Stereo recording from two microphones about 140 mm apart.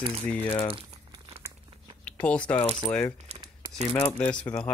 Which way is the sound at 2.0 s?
10° left (ahead or behind).